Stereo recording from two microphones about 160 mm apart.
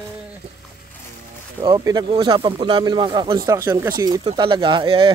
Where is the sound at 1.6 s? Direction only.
25° right (ahead or behind).